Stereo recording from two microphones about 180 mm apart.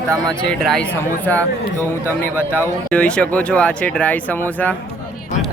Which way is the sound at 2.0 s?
10° left (ahead or behind).